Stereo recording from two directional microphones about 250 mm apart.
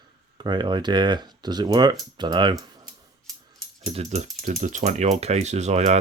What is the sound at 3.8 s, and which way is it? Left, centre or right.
Speech, right.